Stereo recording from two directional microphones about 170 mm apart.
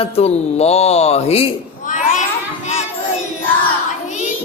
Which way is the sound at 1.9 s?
45° left (ahead or behind).